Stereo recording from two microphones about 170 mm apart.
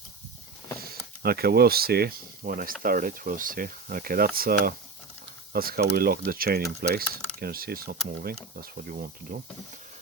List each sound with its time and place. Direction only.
0.8 s speech: 65° right (ahead or behind)